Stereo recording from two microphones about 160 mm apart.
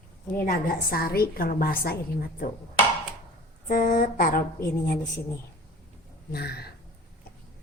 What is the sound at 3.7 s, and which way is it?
Speech, 60° left (ahead or behind).